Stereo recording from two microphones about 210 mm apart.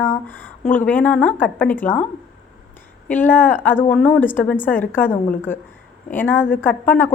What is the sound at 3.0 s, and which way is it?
A woman's voice, 10° left (ahead or behind).